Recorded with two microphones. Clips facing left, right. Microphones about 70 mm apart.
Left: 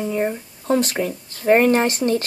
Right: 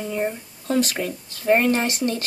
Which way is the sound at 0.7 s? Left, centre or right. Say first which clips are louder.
Left 3 dB; left.